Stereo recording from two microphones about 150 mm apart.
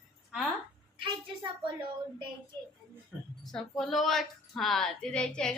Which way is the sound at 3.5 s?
Centre (ahead or behind).